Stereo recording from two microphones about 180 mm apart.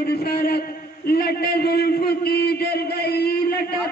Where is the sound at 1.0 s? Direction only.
60° left (ahead or behind).